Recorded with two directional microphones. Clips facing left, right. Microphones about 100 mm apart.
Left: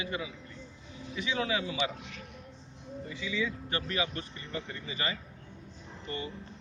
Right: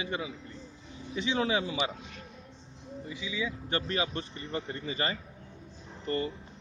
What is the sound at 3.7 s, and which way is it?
Speech, 30° right (ahead or behind).